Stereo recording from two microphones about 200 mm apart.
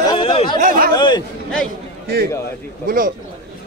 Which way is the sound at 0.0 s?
25° left (ahead or behind).